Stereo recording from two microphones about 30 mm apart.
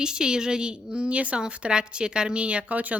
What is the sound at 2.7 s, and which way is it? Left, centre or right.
Speech, right.